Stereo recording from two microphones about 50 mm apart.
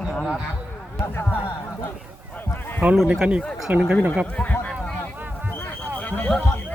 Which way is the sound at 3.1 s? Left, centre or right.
Centre.